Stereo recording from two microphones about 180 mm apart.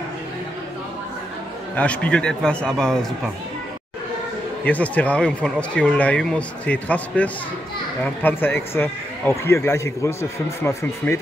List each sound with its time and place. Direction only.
1.8 s a man's voice: 5° left (ahead or behind)
4.6 s speech: 10° left (ahead or behind)